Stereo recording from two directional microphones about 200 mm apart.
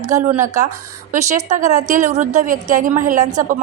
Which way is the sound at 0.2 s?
40° right (ahead or behind).